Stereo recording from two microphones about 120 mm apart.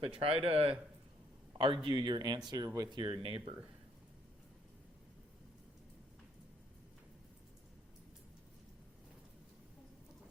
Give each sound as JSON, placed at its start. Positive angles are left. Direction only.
{"t": 0.0, "sound": "speech", "side_deg": -50}